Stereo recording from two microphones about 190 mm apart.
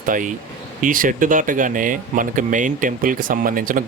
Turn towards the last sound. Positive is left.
turn(degrees=-45)  # may be behind; listen again after turning